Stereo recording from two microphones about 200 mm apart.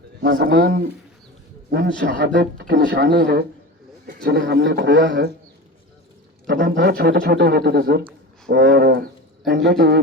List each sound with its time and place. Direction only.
0.3 s a man's voice: 55° right (ahead or behind)
2.1 s speech: 50° right (ahead or behind)
4.0 s a sound: 45° right (ahead or behind)
4.4 s a man's voice: 60° right (ahead or behind)
6.5 s speech: 65° right (ahead or behind)